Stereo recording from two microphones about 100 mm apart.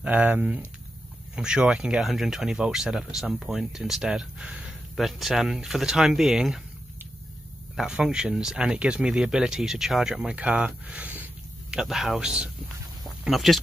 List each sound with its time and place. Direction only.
0.0 s speech: 15° right (ahead or behind)
7.7 s speech: 5° right (ahead or behind)
11.7 s speech: 5° right (ahead or behind)